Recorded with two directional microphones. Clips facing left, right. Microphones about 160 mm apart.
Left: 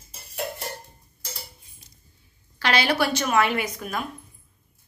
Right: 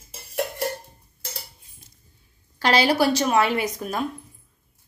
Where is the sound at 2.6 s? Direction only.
35° right (ahead or behind).